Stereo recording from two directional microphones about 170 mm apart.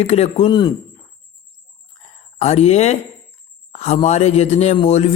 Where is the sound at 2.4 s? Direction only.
40° left (ahead or behind).